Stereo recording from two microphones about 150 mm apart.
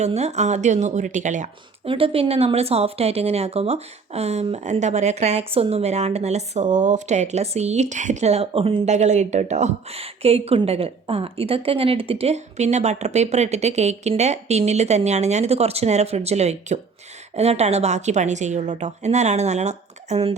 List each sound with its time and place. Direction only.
0.0 s speech: 45° right (ahead or behind)
1.8 s speech: 35° right (ahead or behind)